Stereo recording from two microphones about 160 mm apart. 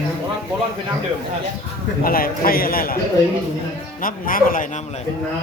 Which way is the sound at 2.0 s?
65° left (ahead or behind).